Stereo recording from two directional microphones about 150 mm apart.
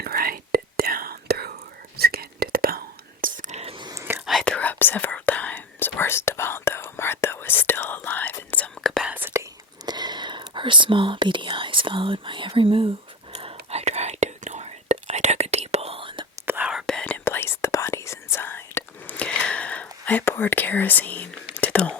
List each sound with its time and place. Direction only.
0.0 s whispering: 85° right; by 3.8 s 45° right (ahead or behind)
3.8 s whispering: 25° right (ahead or behind)
4.3 s whispering: 5° left (ahead or behind)
9.1 s whispering: 15° right (ahead or behind); by 16.2 s 35° right (ahead or behind)
16.3 s whispering: 10° right (ahead or behind)
16.8 s whispering: 5° left (ahead or behind)
17.2 s whispering: 15° left (ahead or behind)